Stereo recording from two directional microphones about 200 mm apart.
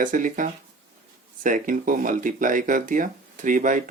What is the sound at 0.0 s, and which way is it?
Speech, 40° right (ahead or behind).